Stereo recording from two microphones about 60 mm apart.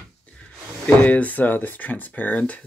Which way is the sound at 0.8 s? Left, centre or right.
Left.